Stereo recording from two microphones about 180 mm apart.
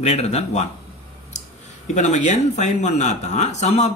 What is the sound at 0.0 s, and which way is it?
Speech, 35° left (ahead or behind).